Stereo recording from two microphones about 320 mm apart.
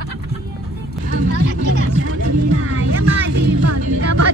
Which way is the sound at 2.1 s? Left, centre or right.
Right.